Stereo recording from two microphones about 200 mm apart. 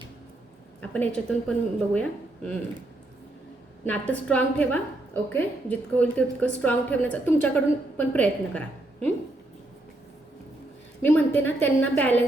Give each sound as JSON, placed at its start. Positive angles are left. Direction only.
{"t": 0.8, "sound": "a woman's voice", "side_deg": 5}
{"t": 3.8, "sound": "a woman's voice", "side_deg": 5}
{"t": 11.0, "sound": "a woman's voice", "side_deg": 10}